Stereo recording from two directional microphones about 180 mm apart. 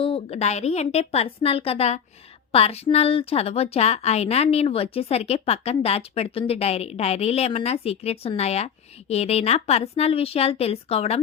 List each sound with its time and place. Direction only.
0.0 s a woman's voice: 35° left (ahead or behind)